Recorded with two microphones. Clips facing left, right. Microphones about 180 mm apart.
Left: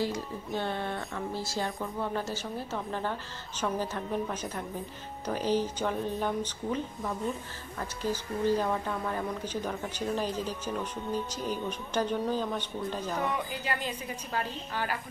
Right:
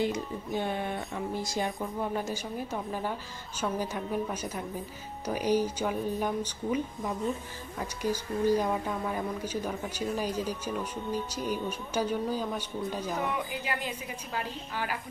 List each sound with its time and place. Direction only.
0.0 s speech: 15° right (ahead or behind)